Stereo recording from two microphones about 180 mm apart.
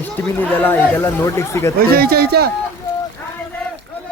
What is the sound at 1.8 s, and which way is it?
Speech, 60° right (ahead or behind).